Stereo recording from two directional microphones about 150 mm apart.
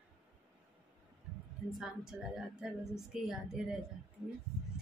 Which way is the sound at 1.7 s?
5° right (ahead or behind).